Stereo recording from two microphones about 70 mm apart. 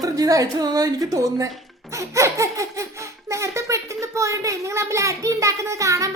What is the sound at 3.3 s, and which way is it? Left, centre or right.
A child's voice, right.